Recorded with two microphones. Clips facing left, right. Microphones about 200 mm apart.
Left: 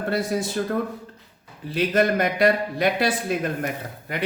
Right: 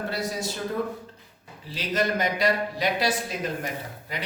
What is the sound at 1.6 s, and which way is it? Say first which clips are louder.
Speech: left 6 dB; 55° left (ahead or behind).